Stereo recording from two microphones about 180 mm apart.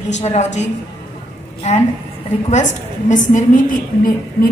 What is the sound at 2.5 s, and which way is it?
A woman's voice, 45° left (ahead or behind).